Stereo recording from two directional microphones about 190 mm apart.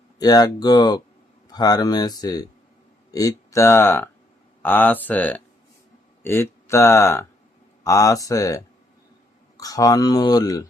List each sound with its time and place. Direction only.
0.2 s speech: 20° left (ahead or behind)